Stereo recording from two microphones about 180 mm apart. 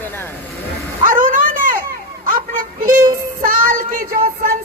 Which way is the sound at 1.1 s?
50° right (ahead or behind).